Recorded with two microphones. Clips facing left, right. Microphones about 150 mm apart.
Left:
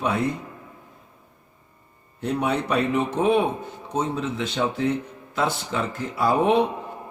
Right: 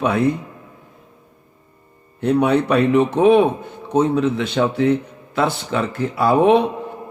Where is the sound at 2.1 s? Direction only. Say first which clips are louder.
Right 8 dB; 65° right (ahead or behind).